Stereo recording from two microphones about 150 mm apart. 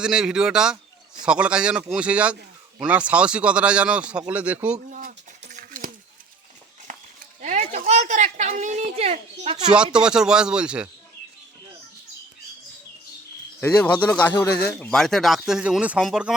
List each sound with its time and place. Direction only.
0.0 s speech: 5° right (ahead or behind)
4.9 s a sound: 60° right (ahead or behind)
7.4 s a sound: 50° right (ahead or behind)
7.9 s speech: 50° right (ahead or behind)
9.6 s speech: 5° right (ahead or behind)
13.6 s speech: 10° left (ahead or behind)